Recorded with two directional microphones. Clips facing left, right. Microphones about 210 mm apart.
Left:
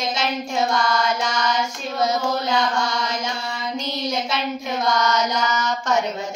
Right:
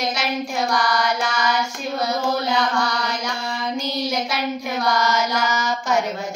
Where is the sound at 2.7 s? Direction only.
25° left (ahead or behind).